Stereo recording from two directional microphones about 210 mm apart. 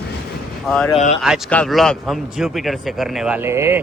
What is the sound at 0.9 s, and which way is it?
Speech, 30° left (ahead or behind).